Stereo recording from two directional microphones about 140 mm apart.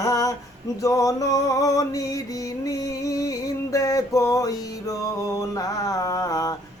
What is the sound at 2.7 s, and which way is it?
Music, 25° left (ahead or behind).